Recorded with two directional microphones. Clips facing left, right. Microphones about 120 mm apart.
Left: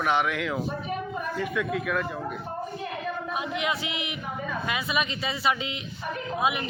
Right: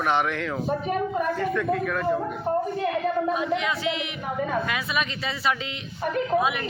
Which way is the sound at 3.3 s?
10° left (ahead or behind).